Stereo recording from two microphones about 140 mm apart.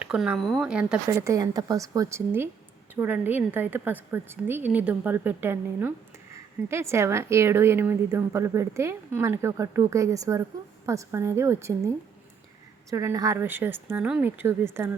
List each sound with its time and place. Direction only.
0.0 s a woman's voice: 5° right (ahead or behind)
1.1 s a woman's voice: 20° right (ahead or behind)
12.9 s a woman's voice: 25° right (ahead or behind)